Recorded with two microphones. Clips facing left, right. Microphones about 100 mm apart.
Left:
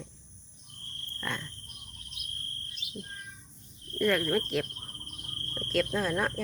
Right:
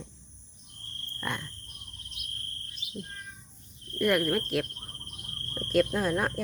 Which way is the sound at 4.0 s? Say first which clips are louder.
Right 1 dB; 10° right (ahead or behind).